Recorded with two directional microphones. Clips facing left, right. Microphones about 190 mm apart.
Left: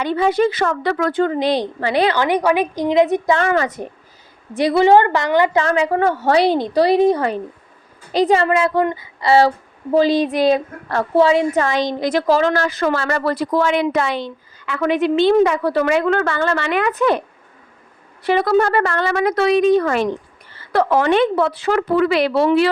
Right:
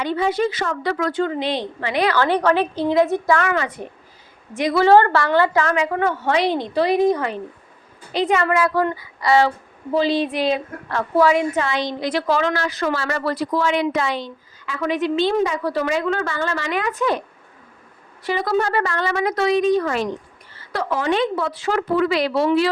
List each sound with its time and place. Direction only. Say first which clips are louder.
0.0 s a woman's voice: left 4 dB; 60° left (ahead or behind); by 2.1 s 30° left (ahead or behind)
2.1 s a woman's voice: left 1 dB; 15° left (ahead or behind); by 4.8 s 35° left (ahead or behind)
4.8 s a woman's voice: left 1 dB; 15° left (ahead or behind)
5.6 s a woman's voice: left 4 dB; 30° left (ahead or behind)
9.9 s a woman's voice: left 4 dB; 45° left (ahead or behind)
11.6 s a woman's voice: left 4 dB; 45° left (ahead or behind); by 17.2 s 60° left (ahead or behind)
18.2 s a woman's voice: left 5 dB; 60° left (ahead or behind)